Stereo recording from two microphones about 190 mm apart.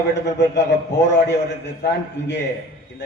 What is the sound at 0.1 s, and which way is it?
A man's voice, 65° left (ahead or behind).